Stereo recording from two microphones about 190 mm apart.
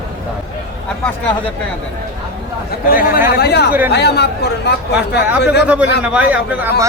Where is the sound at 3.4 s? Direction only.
60° left (ahead or behind).